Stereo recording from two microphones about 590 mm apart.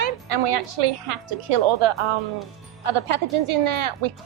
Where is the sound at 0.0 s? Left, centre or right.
Right.